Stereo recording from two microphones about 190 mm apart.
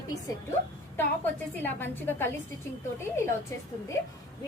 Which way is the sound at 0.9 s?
10° left (ahead or behind).